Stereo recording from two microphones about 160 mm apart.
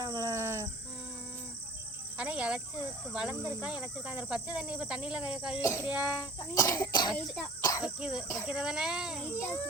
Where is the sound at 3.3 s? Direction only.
20° right (ahead or behind).